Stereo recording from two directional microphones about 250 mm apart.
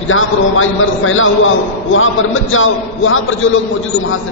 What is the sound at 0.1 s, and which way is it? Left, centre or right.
A woman's voice, left.